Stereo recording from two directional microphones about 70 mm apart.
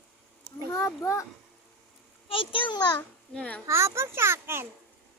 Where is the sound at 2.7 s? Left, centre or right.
Left.